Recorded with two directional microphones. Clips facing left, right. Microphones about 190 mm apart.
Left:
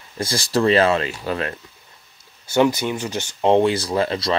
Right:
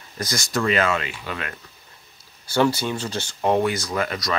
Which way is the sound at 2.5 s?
15° left (ahead or behind).